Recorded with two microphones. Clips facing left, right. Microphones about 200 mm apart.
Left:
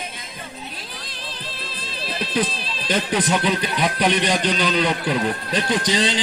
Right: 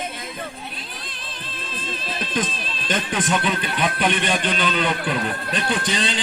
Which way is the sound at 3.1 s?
35° left (ahead or behind).